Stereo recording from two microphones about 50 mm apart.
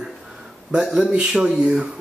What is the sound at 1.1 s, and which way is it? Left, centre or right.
Speech, centre.